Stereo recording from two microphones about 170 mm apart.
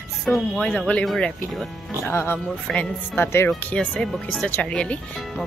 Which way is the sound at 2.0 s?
15° left (ahead or behind).